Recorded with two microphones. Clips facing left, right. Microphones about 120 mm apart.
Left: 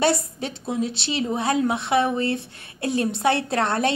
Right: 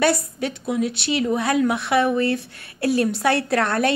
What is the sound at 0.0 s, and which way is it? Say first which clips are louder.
A woman's voice: right 2 dB; 25° left (ahead or behind).